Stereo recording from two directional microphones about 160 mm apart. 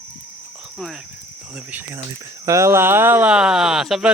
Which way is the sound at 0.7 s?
Centre (ahead or behind).